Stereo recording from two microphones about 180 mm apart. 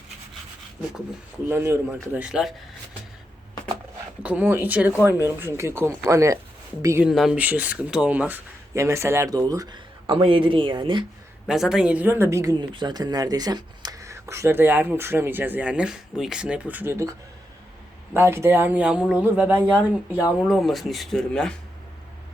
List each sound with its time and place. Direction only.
1.5 s speech: 15° right (ahead or behind)
4.2 s speech: 10° right (ahead or behind)
7.1 s speech: centre (ahead or behind); by 11.0 s 25° right (ahead or behind)
11.4 s speech: 5° right (ahead or behind)